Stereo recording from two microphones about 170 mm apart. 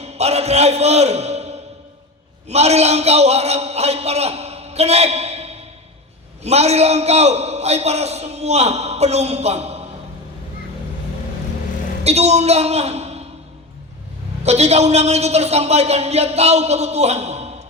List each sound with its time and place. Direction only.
0.0 s music: 40° right (ahead or behind)
2.5 s a man's voice: 40° right (ahead or behind)
12.0 s a woman's voice: 40° right (ahead or behind)
14.4 s a man's voice: 40° right (ahead or behind)